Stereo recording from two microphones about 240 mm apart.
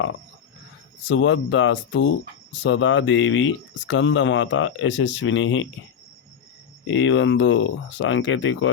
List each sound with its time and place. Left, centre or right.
1.0 s speech: left
6.8 s speech: left